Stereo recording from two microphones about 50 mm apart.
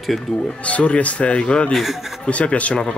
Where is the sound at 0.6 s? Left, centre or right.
Left.